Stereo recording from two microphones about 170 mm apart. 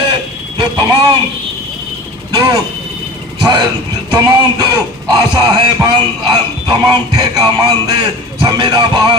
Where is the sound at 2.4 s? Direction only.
20° right (ahead or behind).